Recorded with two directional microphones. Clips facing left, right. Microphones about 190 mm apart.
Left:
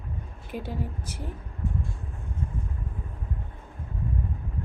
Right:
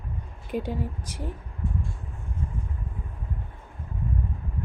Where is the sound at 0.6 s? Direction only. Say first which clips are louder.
Right 3 dB; 15° right (ahead or behind).